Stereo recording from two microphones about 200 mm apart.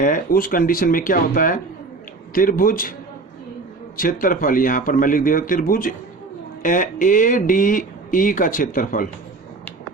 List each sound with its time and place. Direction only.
0.0 s a man's voice: 45° left (ahead or behind)
3.9 s a man's voice: 45° left (ahead or behind)